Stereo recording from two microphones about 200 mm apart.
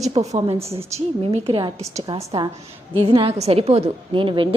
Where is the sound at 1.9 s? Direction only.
15° right (ahead or behind).